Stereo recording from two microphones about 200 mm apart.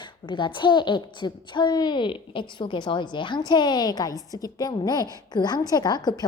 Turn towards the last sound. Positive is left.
turn(degrees=20)  # may be behind; listen again after turning